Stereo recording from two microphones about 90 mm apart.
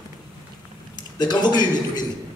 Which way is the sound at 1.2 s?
50° left (ahead or behind).